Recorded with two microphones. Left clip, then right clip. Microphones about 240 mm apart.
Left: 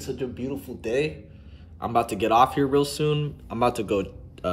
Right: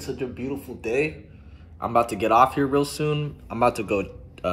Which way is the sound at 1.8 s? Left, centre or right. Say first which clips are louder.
Right 2 dB; centre.